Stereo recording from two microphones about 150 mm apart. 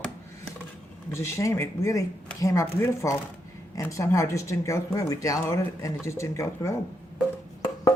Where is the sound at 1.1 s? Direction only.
20° left (ahead or behind).